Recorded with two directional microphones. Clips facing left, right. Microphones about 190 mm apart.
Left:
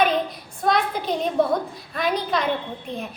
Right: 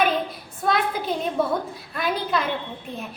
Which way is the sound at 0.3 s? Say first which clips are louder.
Left 2 dB; 5° right (ahead or behind).